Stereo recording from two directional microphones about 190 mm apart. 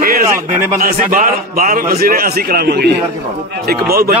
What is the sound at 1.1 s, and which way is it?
A man's voice, 45° right (ahead or behind).